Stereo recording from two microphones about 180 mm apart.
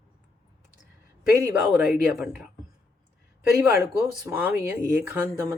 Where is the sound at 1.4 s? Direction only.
5° right (ahead or behind).